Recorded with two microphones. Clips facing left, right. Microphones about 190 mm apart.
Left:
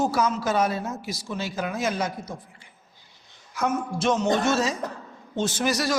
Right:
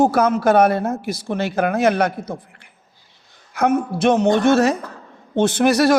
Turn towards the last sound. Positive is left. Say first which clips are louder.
# right 10 dB
turn(degrees=-60)  # may be behind; listen again after turning